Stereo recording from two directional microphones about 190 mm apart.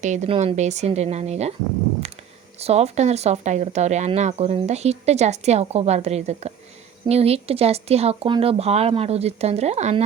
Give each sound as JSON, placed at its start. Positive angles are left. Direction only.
{"t": 0.0, "sound": "speech", "side_deg": -40}
{"t": 2.6, "sound": "speech", "side_deg": -35}